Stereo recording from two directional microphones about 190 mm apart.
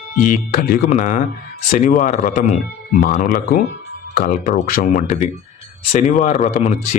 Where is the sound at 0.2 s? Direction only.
45° left (ahead or behind).